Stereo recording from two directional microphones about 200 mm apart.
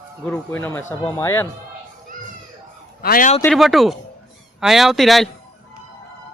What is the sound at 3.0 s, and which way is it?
Speech, 45° left (ahead or behind).